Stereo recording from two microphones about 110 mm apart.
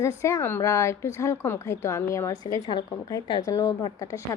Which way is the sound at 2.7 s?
40° left (ahead or behind).